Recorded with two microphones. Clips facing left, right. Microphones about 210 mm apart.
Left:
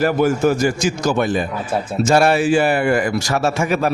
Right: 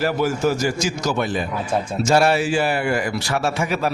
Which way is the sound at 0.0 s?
55° left (ahead or behind).